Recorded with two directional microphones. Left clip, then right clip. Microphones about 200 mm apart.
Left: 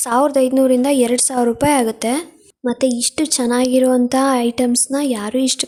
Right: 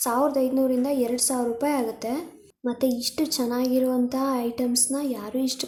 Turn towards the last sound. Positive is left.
turn(degrees=40)  # may be behind; listen again after turning